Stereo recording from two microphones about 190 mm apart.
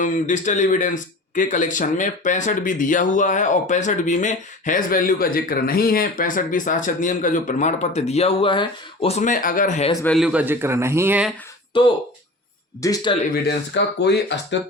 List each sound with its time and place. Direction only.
0.0 s speech: 40° left (ahead or behind)
9.9 s a man's voice: 10° left (ahead or behind)
10.2 s a man's voice: 5° right (ahead or behind)
11.7 s speech: 25° left (ahead or behind)
13.3 s speech: 65° left (ahead or behind)